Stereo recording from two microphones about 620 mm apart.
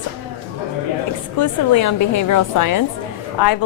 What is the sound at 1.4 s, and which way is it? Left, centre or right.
A woman's voice, left.